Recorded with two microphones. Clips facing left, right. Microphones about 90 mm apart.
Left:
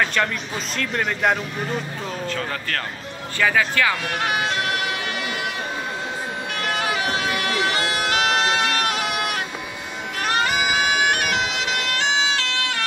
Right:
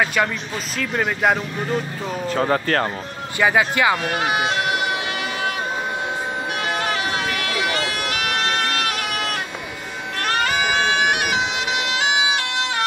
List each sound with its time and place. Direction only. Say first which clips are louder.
0.0 s speech: right 2 dB; 10° right (ahead or behind)
2.2 s speech: right 11 dB; 35° right (ahead or behind)
3.3 s speech: right 2 dB; 20° right (ahead or behind)
7.2 s bagpipes: left 1 dB; 25° left (ahead or behind); by 12.8 s 20° right (ahead or behind)